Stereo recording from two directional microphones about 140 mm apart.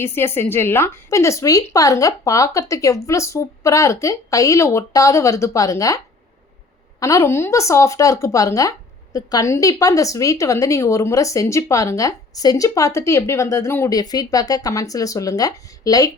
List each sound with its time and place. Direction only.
0.0 s speech: 15° left (ahead or behind)
7.0 s speech: 20° left (ahead or behind)